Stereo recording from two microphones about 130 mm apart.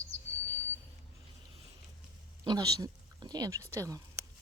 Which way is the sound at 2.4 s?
30° right (ahead or behind).